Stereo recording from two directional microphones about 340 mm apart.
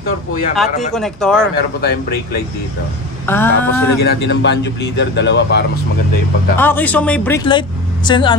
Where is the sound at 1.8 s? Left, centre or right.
Left.